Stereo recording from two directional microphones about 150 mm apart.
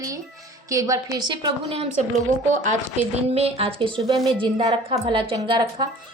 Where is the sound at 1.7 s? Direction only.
50° right (ahead or behind).